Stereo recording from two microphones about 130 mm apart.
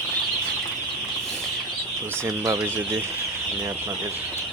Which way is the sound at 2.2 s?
25° right (ahead or behind).